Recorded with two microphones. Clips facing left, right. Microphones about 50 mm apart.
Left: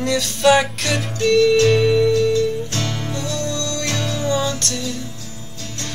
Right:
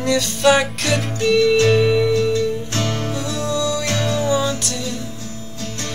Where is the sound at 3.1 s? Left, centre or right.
Centre.